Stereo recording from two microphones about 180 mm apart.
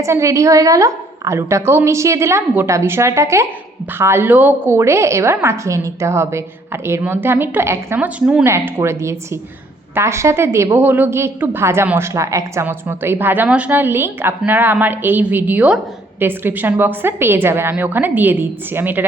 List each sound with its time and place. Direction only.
0.0 s a woman's voice: 15° right (ahead or behind)